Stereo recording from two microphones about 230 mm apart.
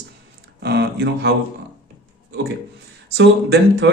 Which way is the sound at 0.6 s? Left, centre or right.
Right.